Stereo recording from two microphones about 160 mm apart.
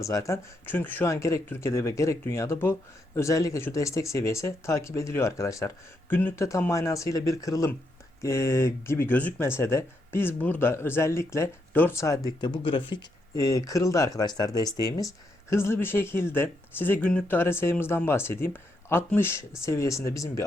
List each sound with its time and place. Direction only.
0.0 s speech: 20° left (ahead or behind)
12.6 s speech: 30° left (ahead or behind)